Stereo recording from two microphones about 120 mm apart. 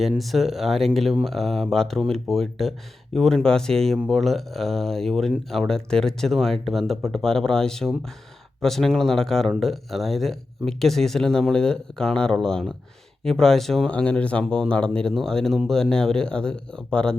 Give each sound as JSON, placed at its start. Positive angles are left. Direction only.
{"t": 0.0, "sound": "speech", "side_deg": 0}
{"t": 3.9, "sound": "speech", "side_deg": -10}